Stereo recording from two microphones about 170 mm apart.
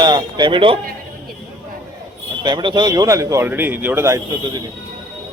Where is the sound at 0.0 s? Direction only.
25° right (ahead or behind).